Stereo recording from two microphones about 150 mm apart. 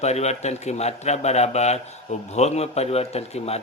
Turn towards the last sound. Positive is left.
turn(degrees=45)  # may be behind; listen again after turning